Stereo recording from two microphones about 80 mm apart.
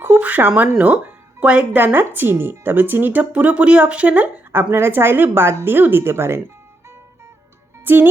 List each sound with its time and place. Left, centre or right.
0.2 s speech: right
4.7 s speech: right
7.9 s speech: right